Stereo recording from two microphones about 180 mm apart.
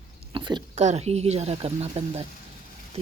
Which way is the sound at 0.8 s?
40° right (ahead or behind).